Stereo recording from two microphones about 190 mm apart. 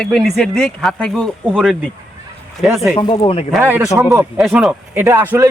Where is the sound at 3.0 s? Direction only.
25° left (ahead or behind).